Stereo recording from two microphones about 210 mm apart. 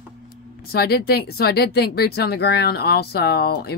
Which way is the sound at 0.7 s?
50° left (ahead or behind).